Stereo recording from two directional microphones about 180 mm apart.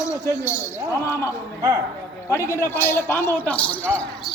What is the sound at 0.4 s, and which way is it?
Speech, 15° left (ahead or behind).